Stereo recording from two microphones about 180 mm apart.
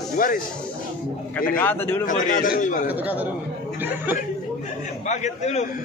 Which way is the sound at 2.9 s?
10° right (ahead or behind).